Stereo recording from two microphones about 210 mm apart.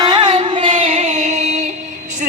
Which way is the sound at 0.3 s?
25° right (ahead or behind).